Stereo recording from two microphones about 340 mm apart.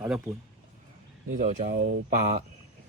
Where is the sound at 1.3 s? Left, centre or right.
Right.